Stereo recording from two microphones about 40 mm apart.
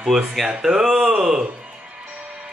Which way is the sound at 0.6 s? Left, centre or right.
Centre.